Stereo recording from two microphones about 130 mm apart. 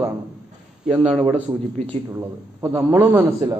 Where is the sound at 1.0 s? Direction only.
45° right (ahead or behind).